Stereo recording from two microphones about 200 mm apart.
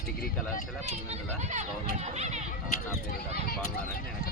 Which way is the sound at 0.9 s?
35° right (ahead or behind).